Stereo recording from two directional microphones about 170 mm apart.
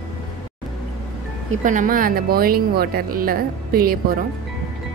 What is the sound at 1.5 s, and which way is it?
Speech, 50° right (ahead or behind).